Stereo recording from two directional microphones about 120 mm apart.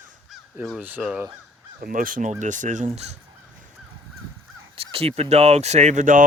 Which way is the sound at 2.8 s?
65° right (ahead or behind).